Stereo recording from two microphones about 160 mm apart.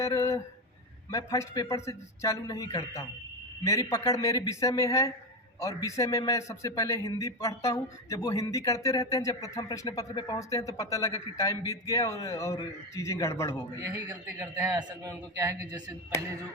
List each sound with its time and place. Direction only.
0.0 s a sound: 15° left (ahead or behind)
1.1 s a man's voice: 20° left (ahead or behind)
13.7 s a man's voice: 20° right (ahead or behind)